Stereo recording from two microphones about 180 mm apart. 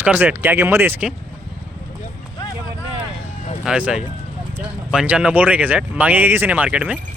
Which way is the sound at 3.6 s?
5° right (ahead or behind).